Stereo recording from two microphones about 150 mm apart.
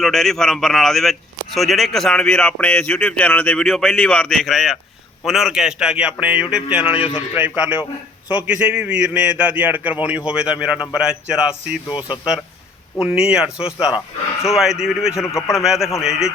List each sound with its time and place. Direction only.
0.0 s a man's voice: centre (ahead or behind)
11.9 s speech: 30° left (ahead or behind)
13.1 s speech: 5° right (ahead or behind)
15.1 s speech: 20° left (ahead or behind)
15.5 s speech: 5° right (ahead or behind)